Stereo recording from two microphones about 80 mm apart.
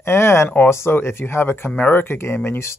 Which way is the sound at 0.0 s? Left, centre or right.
Left.